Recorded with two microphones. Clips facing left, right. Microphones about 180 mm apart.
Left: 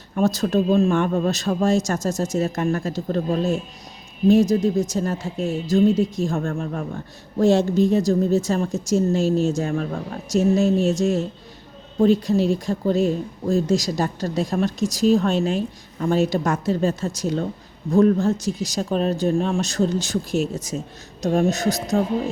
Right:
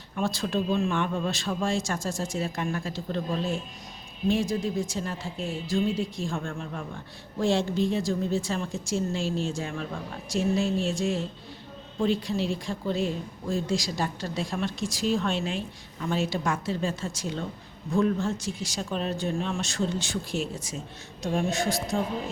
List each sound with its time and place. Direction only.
0.2 s a woman's voice: 40° left (ahead or behind)